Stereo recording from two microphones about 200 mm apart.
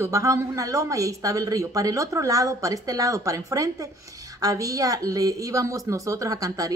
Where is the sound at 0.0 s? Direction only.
15° right (ahead or behind).